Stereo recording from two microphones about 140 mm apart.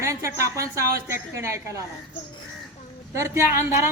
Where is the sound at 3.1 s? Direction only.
20° right (ahead or behind).